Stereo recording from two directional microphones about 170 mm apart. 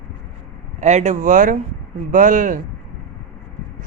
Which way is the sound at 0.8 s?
45° right (ahead or behind).